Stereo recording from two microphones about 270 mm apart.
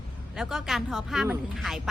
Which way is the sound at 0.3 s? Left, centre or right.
Centre.